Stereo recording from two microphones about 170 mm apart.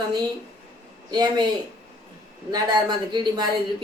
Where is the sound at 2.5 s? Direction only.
25° right (ahead or behind).